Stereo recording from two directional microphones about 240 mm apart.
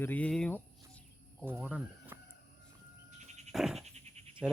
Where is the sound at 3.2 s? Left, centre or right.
Right.